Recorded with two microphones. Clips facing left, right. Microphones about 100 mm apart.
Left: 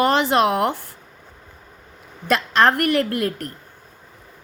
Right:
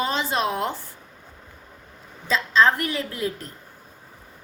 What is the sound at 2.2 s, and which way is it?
A woman's voice, 70° left (ahead or behind).